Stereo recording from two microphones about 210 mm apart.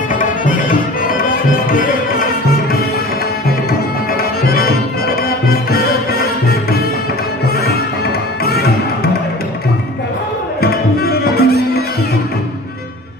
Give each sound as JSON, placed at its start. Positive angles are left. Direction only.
{"t": 0.1, "sound": "music", "side_deg": 40}
{"t": 4.2, "sound": "music", "side_deg": 45}
{"t": 10.6, "sound": "music", "side_deg": 50}